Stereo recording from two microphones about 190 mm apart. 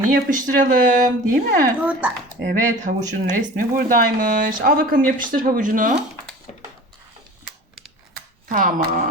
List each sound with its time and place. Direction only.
0.1 s speech: 45° right (ahead or behind)
1.8 s speech: 5° right (ahead or behind)
2.5 s speech: 45° right (ahead or behind)
8.4 s speech: 45° right (ahead or behind)